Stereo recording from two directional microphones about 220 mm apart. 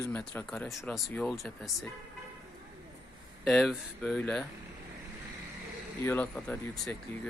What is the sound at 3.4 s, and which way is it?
Speech, centre (ahead or behind).